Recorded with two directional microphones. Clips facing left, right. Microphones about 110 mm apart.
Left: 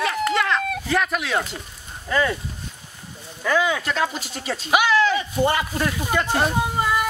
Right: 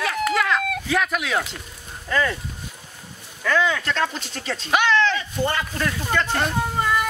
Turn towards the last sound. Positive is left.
turn(degrees=10)  # may be behind; listen again after turning